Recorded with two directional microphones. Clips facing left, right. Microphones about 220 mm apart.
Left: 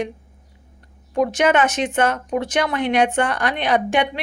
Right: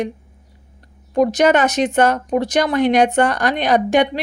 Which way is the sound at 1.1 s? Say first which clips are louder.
Right 3 dB; 35° right (ahead or behind).